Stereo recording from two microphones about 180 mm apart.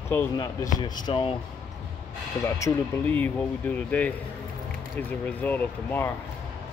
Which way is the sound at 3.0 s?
10° left (ahead or behind).